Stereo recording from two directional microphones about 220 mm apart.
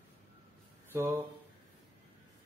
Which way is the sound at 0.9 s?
15° right (ahead or behind).